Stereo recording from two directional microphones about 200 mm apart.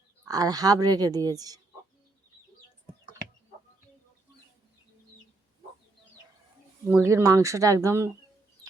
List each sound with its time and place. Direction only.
0.3 s a woman's voice: 20° right (ahead or behind)
6.8 s speech: 10° right (ahead or behind)